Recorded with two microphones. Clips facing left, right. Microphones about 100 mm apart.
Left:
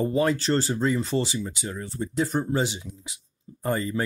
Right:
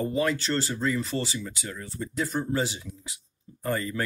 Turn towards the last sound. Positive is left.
turn(degrees=25)  # may be behind; listen again after turning